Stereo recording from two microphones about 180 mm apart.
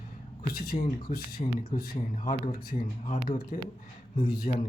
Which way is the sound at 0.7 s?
40° left (ahead or behind).